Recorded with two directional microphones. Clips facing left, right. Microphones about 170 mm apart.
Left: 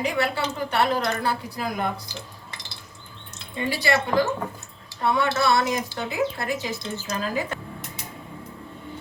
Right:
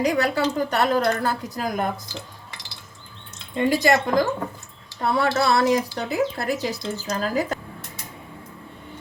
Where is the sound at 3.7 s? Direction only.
45° right (ahead or behind).